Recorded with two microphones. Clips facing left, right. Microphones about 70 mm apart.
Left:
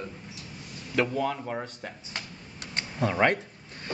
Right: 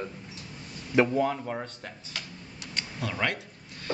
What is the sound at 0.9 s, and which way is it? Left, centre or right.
Mantra, centre.